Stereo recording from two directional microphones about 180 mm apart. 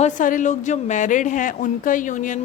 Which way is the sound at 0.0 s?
45° left (ahead or behind).